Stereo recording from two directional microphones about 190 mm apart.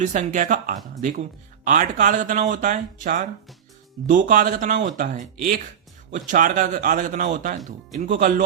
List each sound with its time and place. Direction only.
0.0 s speech: 40° right (ahead or behind)